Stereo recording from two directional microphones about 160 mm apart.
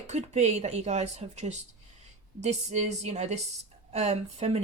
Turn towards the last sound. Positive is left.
turn(degrees=-40)  # may be behind; listen again after turning